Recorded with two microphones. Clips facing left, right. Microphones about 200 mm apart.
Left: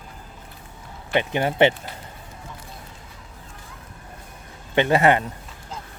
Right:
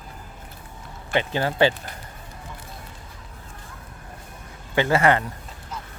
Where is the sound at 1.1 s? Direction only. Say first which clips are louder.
Left 2 dB; 20° left (ahead or behind).